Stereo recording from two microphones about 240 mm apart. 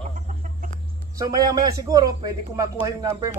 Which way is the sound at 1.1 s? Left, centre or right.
Centre.